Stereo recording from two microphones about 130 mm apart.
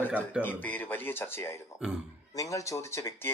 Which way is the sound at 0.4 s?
15° left (ahead or behind).